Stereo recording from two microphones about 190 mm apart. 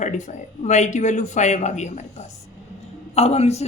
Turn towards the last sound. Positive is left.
turn(degrees=35)  # may be behind; listen again after turning